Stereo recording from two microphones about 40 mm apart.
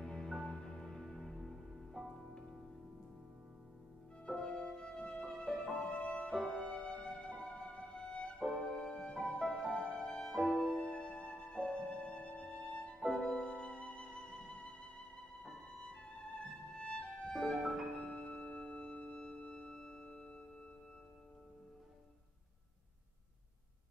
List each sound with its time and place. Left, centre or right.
0.0 s music: centre
4.3 s music: centre
6.3 s music: centre
8.5 s music: centre
9.9 s music: centre
17.3 s music: centre
17.6 s music: centre
17.9 s music: left